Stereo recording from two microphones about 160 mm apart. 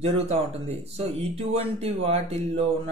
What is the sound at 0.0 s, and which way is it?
Speech, 40° right (ahead or behind).